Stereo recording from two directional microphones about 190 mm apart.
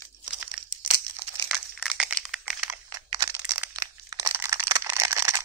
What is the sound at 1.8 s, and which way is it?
Crushing, 5° right (ahead or behind).